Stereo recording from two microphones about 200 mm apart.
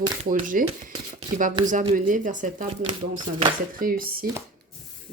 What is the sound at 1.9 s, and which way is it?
Speech, 40° right (ahead or behind).